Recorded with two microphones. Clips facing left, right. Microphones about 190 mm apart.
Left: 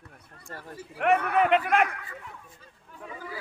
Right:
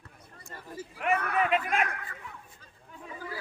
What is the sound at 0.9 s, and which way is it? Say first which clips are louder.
Speech: left 5 dB; 65° left (ahead or behind).